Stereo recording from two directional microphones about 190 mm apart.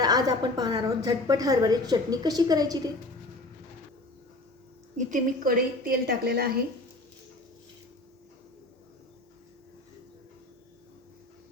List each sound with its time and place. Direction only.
0.0 s a woman's voice: 20° right (ahead or behind)
4.9 s a woman's voice: 45° right (ahead or behind)